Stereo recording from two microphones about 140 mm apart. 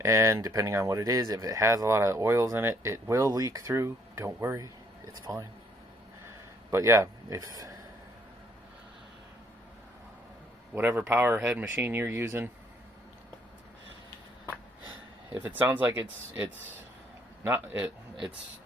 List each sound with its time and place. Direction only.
0.0 s speech: 20° right (ahead or behind)
6.7 s speech: 20° right (ahead or behind)
10.8 s speech: 15° right (ahead or behind)
15.3 s speech: 10° right (ahead or behind)